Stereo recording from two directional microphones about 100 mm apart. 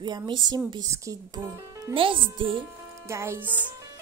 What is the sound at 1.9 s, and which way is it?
Speech, 60° right (ahead or behind).